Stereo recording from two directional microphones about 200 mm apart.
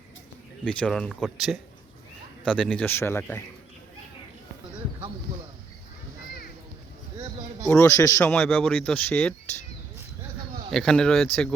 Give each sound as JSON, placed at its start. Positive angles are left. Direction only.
{"t": 0.6, "sound": "speech", "side_deg": 5}
{"t": 7.7, "sound": "speech", "side_deg": 15}
{"t": 10.7, "sound": "speech", "side_deg": 0}